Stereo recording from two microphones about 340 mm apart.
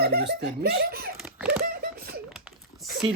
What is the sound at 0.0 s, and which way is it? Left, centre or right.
Speech, right.